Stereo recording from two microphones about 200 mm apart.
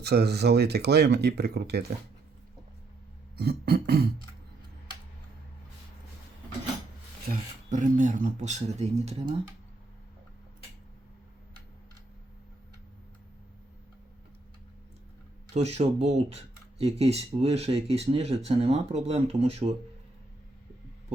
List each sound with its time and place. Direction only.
0.0 s speech: 55° right (ahead or behind)
3.3 s beatboxing: 55° right (ahead or behind)
7.3 s speech: 40° right (ahead or behind)
15.5 s speech: 30° right (ahead or behind)